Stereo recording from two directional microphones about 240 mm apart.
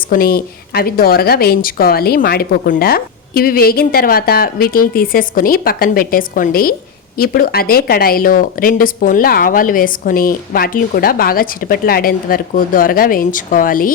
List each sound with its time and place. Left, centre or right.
0.1 s speech: left